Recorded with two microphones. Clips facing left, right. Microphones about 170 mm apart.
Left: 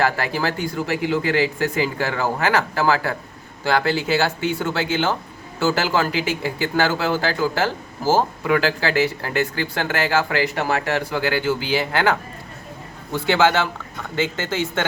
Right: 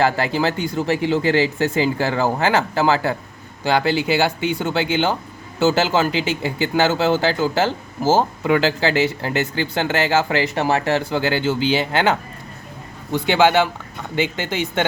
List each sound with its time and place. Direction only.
0.0 s speech: 25° right (ahead or behind)
13.1 s speech: 15° right (ahead or behind)